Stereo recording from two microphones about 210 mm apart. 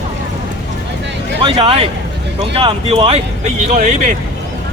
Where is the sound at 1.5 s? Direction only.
25° right (ahead or behind).